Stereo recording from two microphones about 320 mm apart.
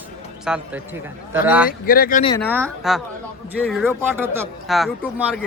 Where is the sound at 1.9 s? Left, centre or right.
Left.